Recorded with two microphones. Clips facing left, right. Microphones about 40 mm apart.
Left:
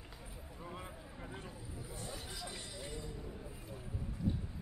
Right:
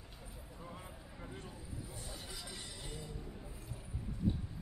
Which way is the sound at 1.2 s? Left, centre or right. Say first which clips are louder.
Left 1 dB; centre.